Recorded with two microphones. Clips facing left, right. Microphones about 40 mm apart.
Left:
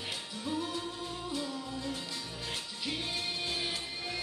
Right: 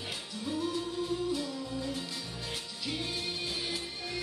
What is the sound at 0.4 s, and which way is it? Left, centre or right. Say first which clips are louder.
Music: right 2 dB; centre.